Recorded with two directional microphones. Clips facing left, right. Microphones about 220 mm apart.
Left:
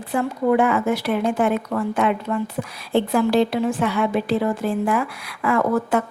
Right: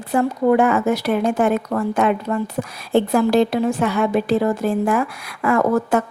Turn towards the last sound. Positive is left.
turn(degrees=-45)  # may be behind; listen again after turning